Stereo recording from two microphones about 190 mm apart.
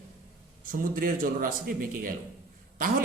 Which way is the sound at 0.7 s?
45° right (ahead or behind).